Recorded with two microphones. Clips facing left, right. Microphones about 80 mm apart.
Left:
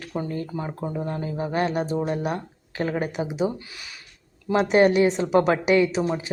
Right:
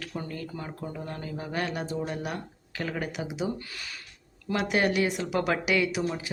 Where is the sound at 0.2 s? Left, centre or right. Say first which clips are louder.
Left 8 dB; left.